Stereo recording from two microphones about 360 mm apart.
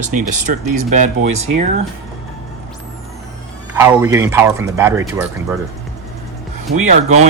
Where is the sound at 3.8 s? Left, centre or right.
Centre.